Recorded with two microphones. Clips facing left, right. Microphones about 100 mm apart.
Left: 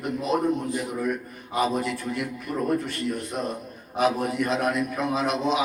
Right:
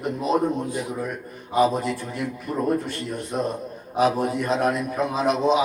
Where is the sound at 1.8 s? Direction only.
35° right (ahead or behind).